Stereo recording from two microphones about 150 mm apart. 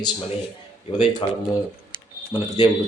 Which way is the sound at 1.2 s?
40° left (ahead or behind).